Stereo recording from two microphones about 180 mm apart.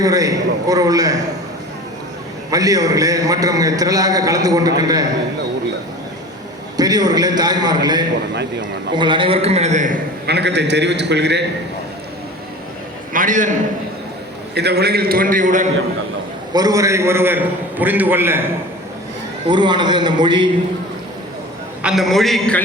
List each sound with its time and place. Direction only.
0.0 s a man's voice: 20° right (ahead or behind)
2.5 s a man's voice: 20° right (ahead or behind)
6.7 s a man's voice: 20° right (ahead or behind); by 10.0 s 45° right (ahead or behind)
10.2 s a man's voice: 70° right (ahead or behind)
13.1 s a man's voice: 45° right (ahead or behind)
14.5 s a man's voice: 65° right (ahead or behind); by 15.7 s 45° right (ahead or behind)
16.5 s a man's voice: 20° right (ahead or behind)
19.5 s a man's voice: 25° right (ahead or behind)
21.8 s a man's voice: 5° right (ahead or behind)